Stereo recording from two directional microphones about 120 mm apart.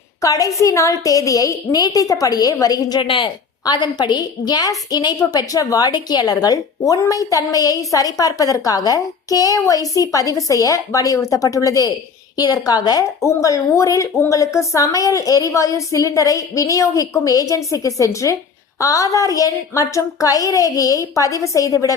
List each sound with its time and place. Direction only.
0.2 s a woman's voice: 30° left (ahead or behind)